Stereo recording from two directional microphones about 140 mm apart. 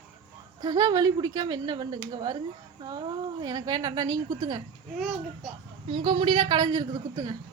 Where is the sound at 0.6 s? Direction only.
30° right (ahead or behind).